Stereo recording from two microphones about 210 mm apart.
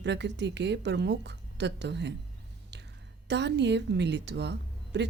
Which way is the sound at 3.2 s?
55° right (ahead or behind).